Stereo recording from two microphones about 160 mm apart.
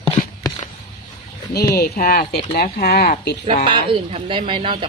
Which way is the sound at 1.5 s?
75° left (ahead or behind).